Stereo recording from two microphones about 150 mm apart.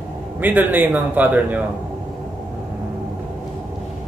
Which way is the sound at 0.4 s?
10° right (ahead or behind).